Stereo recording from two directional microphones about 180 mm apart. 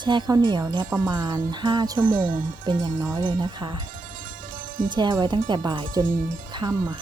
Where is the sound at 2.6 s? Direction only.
25° right (ahead or behind).